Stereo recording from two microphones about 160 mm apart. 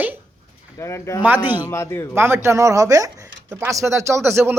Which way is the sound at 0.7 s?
15° left (ahead or behind).